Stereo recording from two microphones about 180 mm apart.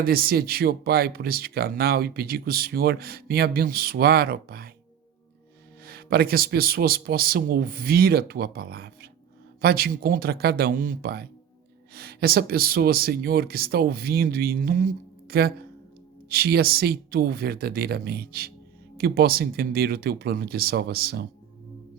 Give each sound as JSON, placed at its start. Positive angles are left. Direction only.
{"t": 0.0, "sound": "speech", "side_deg": -55}
{"t": 5.8, "sound": "speech", "side_deg": -60}